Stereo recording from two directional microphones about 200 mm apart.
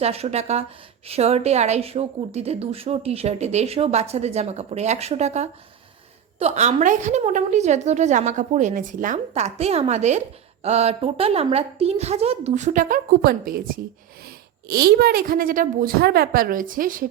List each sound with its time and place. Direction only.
0.0 s a woman's voice: 30° right (ahead or behind)